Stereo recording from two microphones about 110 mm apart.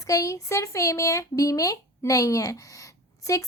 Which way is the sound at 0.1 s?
30° left (ahead or behind).